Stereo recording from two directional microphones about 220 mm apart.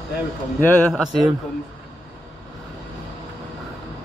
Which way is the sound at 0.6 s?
10° left (ahead or behind).